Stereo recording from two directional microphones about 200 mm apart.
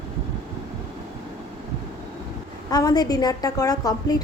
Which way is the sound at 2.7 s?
20° left (ahead or behind).